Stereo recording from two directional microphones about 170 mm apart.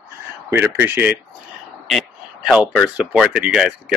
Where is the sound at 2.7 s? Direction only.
5° right (ahead or behind).